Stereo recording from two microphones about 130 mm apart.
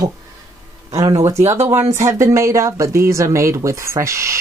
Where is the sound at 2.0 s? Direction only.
20° right (ahead or behind).